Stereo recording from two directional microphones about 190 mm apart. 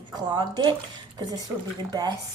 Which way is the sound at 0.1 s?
20° right (ahead or behind).